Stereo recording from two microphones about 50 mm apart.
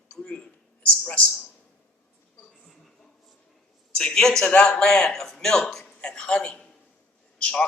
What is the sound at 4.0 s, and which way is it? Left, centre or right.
Speech, centre.